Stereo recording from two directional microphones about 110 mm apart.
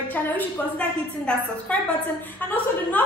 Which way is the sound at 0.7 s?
10° left (ahead or behind).